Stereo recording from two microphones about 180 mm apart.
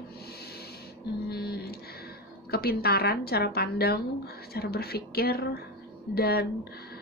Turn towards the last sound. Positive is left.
turn(degrees=60)  # may be behind; listen again after turning